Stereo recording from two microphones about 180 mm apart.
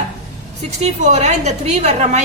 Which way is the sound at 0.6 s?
35° right (ahead or behind).